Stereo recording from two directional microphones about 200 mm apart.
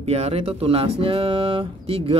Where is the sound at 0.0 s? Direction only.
30° right (ahead or behind).